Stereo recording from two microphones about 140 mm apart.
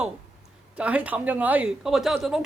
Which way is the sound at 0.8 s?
10° right (ahead or behind).